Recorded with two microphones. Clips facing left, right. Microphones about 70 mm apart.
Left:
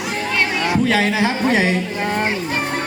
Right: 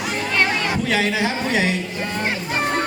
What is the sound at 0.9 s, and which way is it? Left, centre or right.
Music, left.